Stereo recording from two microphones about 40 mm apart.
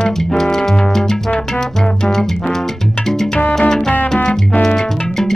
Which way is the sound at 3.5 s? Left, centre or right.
Centre.